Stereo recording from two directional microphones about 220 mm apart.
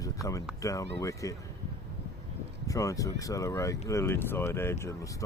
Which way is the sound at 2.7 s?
15° left (ahead or behind).